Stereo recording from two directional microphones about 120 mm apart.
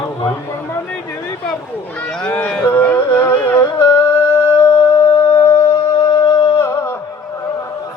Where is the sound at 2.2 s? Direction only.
10° left (ahead or behind).